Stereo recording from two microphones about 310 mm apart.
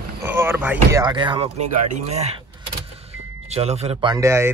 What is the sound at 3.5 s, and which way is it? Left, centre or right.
Speech, centre.